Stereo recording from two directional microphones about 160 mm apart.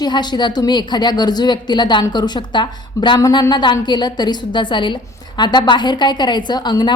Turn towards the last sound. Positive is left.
turn(degrees=25)  # may be behind; listen again after turning